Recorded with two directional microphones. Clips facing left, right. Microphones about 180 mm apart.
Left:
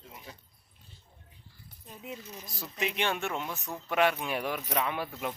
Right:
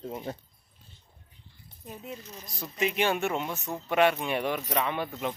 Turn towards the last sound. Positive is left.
turn(degrees=5)  # may be behind; listen again after turning